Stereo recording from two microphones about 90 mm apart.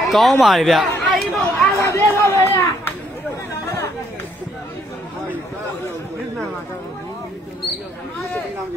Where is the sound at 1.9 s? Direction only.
25° left (ahead or behind).